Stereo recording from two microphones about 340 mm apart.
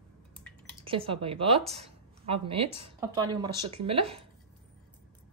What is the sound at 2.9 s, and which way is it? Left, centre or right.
Speech, centre.